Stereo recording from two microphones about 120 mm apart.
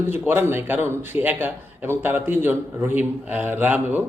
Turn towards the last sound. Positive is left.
turn(degrees=-15)  # may be behind; listen again after turning